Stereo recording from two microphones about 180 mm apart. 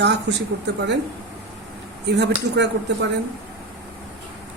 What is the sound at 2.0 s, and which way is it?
Speech, 75° right (ahead or behind).